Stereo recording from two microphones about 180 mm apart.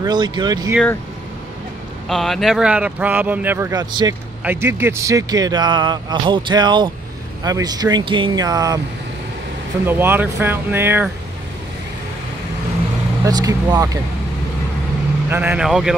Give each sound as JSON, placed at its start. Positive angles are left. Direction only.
{"t": 0.0, "sound": "a man's voice", "side_deg": -25}
{"t": 2.0, "sound": "a man's voice", "side_deg": 0}
{"t": 9.8, "sound": "speech", "side_deg": -10}
{"t": 13.2, "sound": "a man's voice", "side_deg": -20}
{"t": 15.2, "sound": "speech", "side_deg": -10}